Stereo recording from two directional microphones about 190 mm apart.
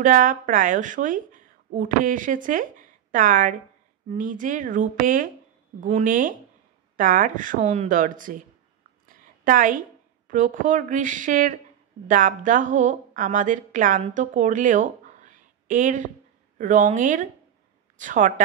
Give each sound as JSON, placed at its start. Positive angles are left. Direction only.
{"t": 0.0, "sound": "a woman's voice", "side_deg": -45}